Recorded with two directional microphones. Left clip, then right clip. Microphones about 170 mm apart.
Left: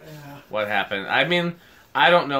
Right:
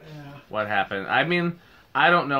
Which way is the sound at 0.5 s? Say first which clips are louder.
Left 1 dB; 35° right (ahead or behind).